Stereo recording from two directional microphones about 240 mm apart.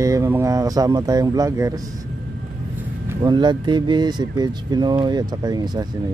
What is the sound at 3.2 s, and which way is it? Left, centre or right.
Speech, centre.